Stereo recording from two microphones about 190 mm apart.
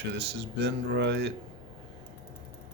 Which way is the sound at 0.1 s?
60° right (ahead or behind).